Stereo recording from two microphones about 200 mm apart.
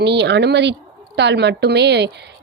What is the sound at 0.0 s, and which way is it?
A woman's voice, 60° right (ahead or behind).